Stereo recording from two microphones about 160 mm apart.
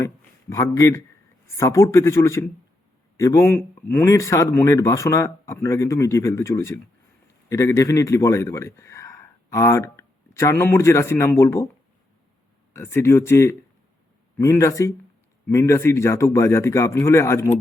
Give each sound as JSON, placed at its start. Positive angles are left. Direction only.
{"t": 0.5, "sound": "a man's voice", "side_deg": 20}
{"t": 12.7, "sound": "speech", "side_deg": 15}